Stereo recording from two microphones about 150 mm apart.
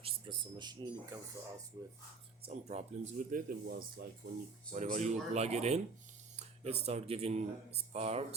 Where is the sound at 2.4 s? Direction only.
45° right (ahead or behind); by 4.0 s 75° right (ahead or behind).